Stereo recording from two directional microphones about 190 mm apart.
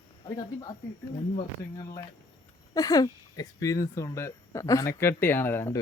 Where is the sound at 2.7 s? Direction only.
20° left (ahead or behind).